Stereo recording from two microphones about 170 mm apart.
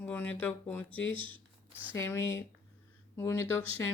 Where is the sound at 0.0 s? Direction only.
10° left (ahead or behind).